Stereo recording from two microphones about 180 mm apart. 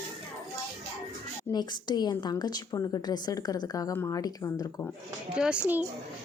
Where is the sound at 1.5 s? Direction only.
25° left (ahead or behind).